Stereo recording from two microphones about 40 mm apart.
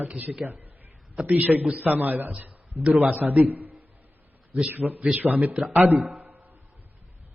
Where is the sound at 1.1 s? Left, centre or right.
Right.